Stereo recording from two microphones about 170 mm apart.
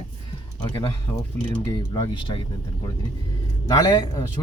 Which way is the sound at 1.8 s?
30° left (ahead or behind).